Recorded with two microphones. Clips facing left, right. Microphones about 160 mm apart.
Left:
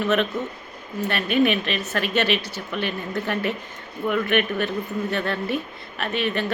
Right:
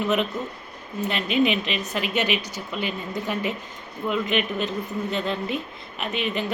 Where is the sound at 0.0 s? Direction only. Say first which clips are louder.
Left 2 dB; 15° right (ahead or behind).